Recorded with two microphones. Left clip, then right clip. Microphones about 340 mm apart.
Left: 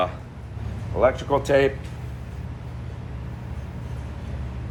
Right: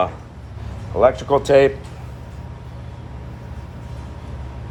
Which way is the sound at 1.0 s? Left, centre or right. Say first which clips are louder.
Right 5 dB; right.